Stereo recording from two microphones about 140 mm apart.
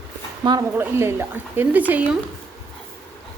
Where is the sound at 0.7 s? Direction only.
20° right (ahead or behind).